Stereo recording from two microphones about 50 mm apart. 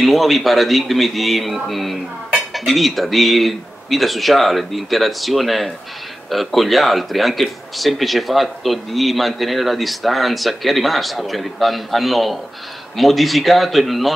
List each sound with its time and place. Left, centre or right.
0.0 s speech: centre